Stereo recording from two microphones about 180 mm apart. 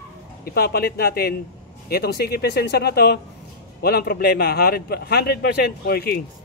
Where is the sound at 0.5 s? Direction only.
60° left (ahead or behind).